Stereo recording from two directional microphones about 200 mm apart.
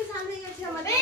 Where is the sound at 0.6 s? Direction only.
15° left (ahead or behind).